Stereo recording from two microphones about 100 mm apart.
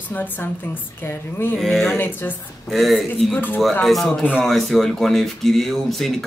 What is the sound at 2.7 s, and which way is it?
Speech, centre (ahead or behind).